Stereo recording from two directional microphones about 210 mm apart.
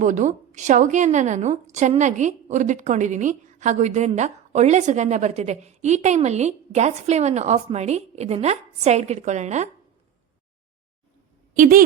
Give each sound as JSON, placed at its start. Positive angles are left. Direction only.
{"t": 0.0, "sound": "a woman's voice", "side_deg": -35}
{"t": 11.5, "sound": "a woman's voice", "side_deg": -40}